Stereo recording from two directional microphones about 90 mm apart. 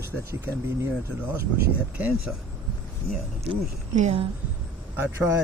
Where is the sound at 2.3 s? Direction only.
10° right (ahead or behind).